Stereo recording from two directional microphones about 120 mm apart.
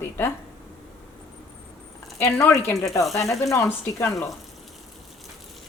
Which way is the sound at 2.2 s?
25° left (ahead or behind).